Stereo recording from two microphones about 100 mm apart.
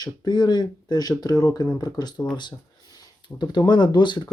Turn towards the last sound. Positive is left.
turn(degrees=50)  # may be behind; listen again after turning